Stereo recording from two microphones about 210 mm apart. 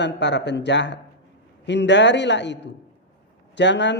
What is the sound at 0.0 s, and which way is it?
Speech, 55° left (ahead or behind).